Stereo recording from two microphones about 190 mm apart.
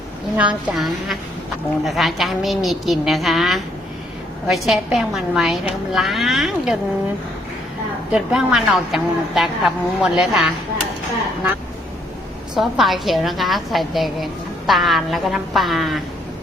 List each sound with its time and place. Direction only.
0.3 s a woman's voice: 5° right (ahead or behind)
8.1 s a woman's voice: centre (ahead or behind)
12.5 s a woman's voice: centre (ahead or behind)